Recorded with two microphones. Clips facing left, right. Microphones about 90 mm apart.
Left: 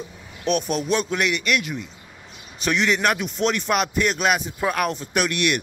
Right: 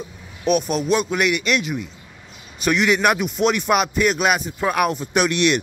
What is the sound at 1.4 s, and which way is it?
Speech, 20° right (ahead or behind).